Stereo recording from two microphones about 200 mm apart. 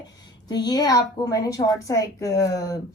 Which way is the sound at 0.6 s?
20° left (ahead or behind).